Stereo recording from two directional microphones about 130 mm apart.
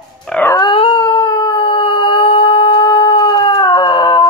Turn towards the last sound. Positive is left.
turn(degrees=35)  # may be behind; listen again after turning